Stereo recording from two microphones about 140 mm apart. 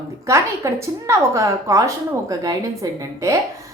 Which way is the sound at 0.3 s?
20° right (ahead or behind).